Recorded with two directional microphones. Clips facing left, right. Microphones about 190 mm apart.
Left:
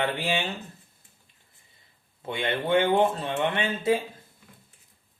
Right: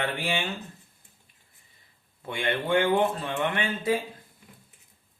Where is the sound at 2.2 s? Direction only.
25° left (ahead or behind).